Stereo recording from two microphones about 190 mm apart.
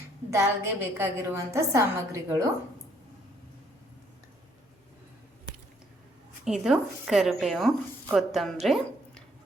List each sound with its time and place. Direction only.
0.3 s a woman's voice: 15° right (ahead or behind)
6.4 s speech: centre (ahead or behind)
8.6 s a sound: centre (ahead or behind)